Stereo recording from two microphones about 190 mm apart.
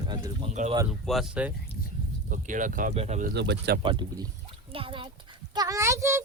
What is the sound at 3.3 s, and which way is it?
Speech, 65° right (ahead or behind).